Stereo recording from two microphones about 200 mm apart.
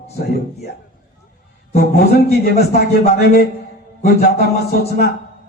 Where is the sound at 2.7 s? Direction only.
55° left (ahead or behind).